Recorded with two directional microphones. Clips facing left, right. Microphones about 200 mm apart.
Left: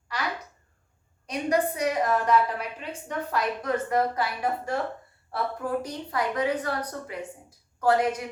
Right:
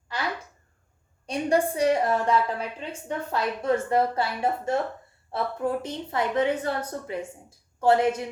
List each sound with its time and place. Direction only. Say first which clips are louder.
1.3 s a woman's voice: right 2 dB; 30° right (ahead or behind)